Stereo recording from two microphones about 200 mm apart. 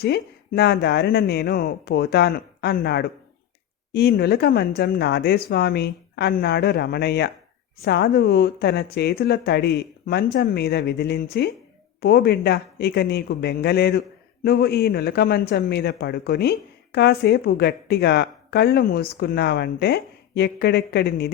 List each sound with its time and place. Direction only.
0.0 s speech: 55° left (ahead or behind)